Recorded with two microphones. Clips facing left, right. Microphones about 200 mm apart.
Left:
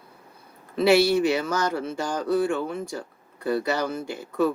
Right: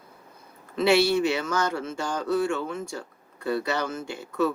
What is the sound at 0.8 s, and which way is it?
Speech, 35° left (ahead or behind).